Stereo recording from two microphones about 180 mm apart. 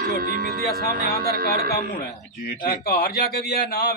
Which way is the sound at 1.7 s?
55° left (ahead or behind).